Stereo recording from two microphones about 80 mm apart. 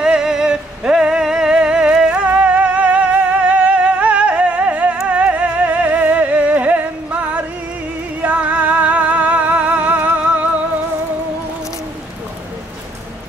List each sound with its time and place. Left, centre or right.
0.0 s music: centre